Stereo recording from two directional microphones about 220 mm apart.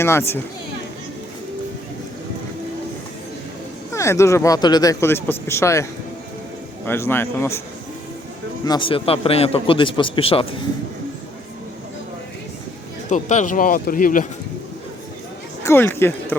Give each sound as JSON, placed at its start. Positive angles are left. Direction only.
{"t": 0.0, "sound": "speech", "side_deg": 10}
{"t": 3.9, "sound": "speech", "side_deg": 15}
{"t": 8.6, "sound": "a man's voice", "side_deg": 20}
{"t": 13.1, "sound": "speech", "side_deg": 35}
{"t": 15.6, "sound": "speech", "side_deg": 10}